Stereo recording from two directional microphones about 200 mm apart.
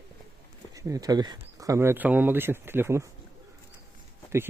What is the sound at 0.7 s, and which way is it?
Speech, 15° right (ahead or behind).